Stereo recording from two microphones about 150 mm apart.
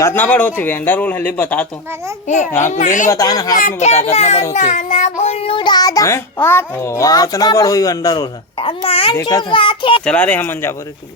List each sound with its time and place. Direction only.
0.0 s speech: 15° left (ahead or behind)
2.2 s a child's voice: 50° left (ahead or behind)
2.7 s child singing: 60° left (ahead or behind)
3.1 s a child's voice: 25° left (ahead or behind)
3.5 s child singing: 65° left (ahead or behind); by 4.0 s 50° left (ahead or behind)
4.1 s a child's voice: 45° left (ahead or behind)
4.5 s child singing: 55° left (ahead or behind)
5.2 s a child's voice: 40° left (ahead or behind)
10.1 s speech: 10° left (ahead or behind)